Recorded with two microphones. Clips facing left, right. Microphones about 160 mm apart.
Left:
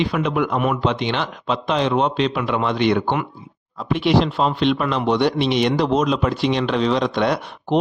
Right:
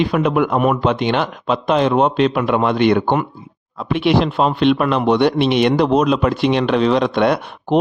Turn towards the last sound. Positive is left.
turn(degrees=-55)  # may be behind; listen again after turning